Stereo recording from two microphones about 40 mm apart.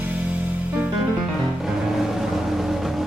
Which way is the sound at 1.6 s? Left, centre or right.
Centre.